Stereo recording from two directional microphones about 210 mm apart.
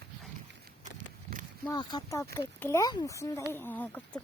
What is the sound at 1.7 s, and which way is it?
Speech, 20° left (ahead or behind).